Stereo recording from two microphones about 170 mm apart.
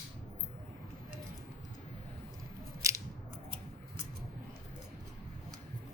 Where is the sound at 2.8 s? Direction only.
20° right (ahead or behind).